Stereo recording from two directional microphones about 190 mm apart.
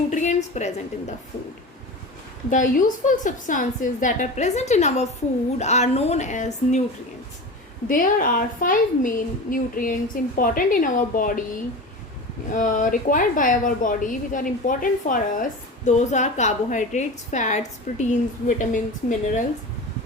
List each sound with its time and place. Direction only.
0.1 s a woman's voice: 40° left (ahead or behind)
2.5 s a woman's voice: 40° left (ahead or behind)
7.9 s a woman's voice: 45° left (ahead or behind)
12.5 s a woman's voice: 45° left (ahead or behind)